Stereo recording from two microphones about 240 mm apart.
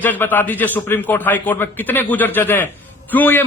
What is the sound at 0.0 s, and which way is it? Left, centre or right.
Speech, centre.